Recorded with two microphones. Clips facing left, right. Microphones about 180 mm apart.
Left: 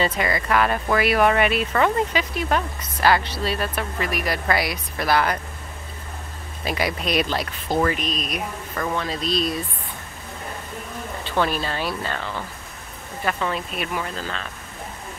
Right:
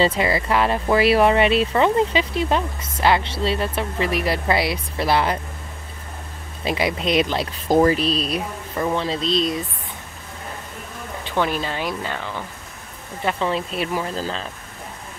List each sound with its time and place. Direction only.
0.0 s speech: 30° right (ahead or behind)
6.6 s speech: 25° right (ahead or behind)
7.6 s speech: 40° right (ahead or behind); by 9.6 s 20° right (ahead or behind)
11.2 s speech: 15° right (ahead or behind)
13.2 s speech: 25° right (ahead or behind)